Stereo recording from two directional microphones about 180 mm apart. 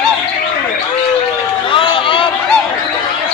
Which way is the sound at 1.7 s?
30° left (ahead or behind).